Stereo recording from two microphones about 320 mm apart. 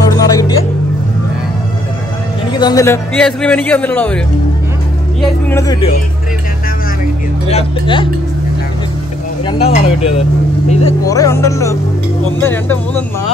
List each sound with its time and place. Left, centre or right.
0.1 s music: centre
2.6 s a man's voice: centre
5.2 s speech: centre
7.4 s speech: centre
9.5 s speech: centre